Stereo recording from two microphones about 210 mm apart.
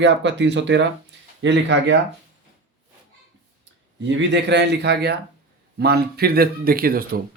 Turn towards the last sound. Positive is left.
turn(degrees=-45)  # may be behind; listen again after turning